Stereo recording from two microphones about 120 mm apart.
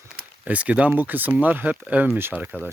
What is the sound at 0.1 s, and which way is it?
Speech, 10° right (ahead or behind).